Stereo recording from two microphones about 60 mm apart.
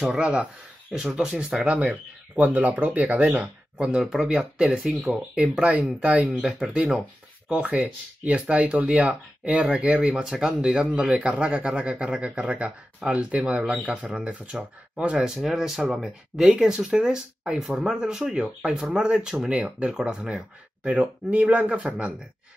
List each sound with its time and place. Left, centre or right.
0.0 s speech: centre
1.7 s a man's voice: right
3.9 s a man's voice: centre; by 9.7 s right
9.7 s a man's voice: centre